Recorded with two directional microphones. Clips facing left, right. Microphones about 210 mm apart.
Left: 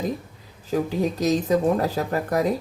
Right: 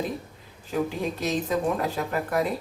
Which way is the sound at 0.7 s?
40° left (ahead or behind).